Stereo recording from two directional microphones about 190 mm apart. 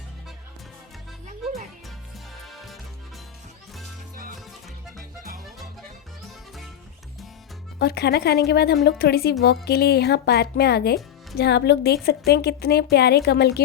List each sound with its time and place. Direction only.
2.4 s music: centre (ahead or behind)
7.8 s a woman's voice: 55° left (ahead or behind)